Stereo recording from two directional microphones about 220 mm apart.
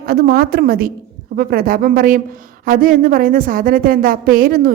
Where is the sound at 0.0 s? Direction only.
45° right (ahead or behind).